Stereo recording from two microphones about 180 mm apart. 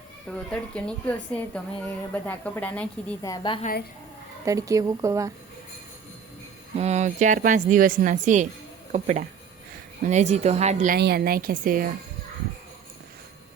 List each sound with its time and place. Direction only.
0.3 s speech: 5° left (ahead or behind)
3.2 s a woman's voice: 20° left (ahead or behind)
3.6 s a woman's voice: 55° left (ahead or behind)
4.4 s a woman's voice: 20° right (ahead or behind)
6.7 s a woman's voice: 40° right (ahead or behind)
10.9 s a woman's voice: 60° right (ahead or behind)